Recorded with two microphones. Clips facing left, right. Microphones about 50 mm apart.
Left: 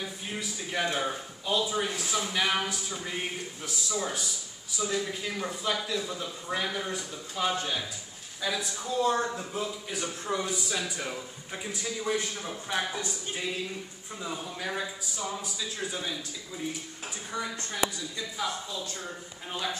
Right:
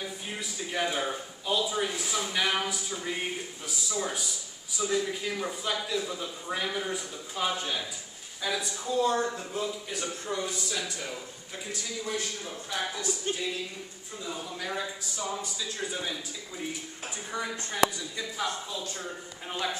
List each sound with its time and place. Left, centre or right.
0.0 s a man's voice: centre; by 13.1 s left
14.2 s speech: centre
14.7 s a man's voice: centre
17.3 s speech: centre
19.5 s speech: centre